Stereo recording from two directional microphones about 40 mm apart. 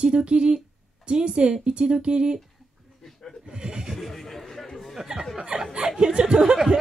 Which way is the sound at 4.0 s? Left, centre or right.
Centre.